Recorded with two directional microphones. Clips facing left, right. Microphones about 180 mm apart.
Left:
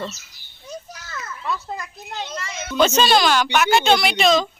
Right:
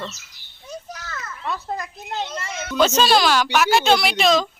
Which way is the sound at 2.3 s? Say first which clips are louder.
Right 1 dB; centre (ahead or behind).